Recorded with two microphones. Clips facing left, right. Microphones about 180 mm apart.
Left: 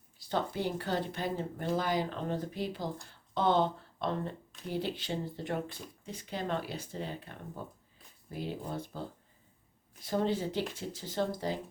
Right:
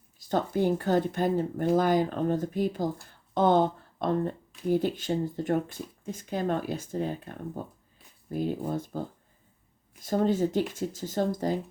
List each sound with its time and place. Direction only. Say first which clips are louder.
0.2 s speech: right 7 dB; 45° right (ahead or behind)